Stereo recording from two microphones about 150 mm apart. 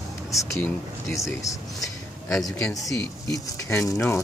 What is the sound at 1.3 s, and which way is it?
Speech, 20° left (ahead or behind).